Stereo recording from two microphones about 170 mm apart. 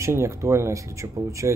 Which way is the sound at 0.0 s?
15° right (ahead or behind).